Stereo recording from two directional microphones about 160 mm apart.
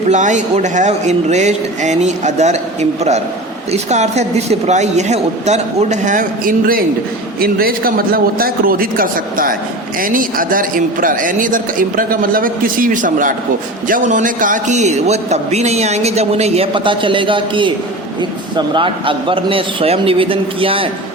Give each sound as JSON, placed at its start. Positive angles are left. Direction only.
{"t": 0.1, "sound": "a man's voice", "side_deg": -50}
{"t": 3.7, "sound": "a man's voice", "side_deg": -45}